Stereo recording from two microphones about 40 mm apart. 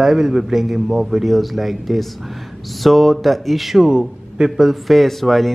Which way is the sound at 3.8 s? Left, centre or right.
Centre.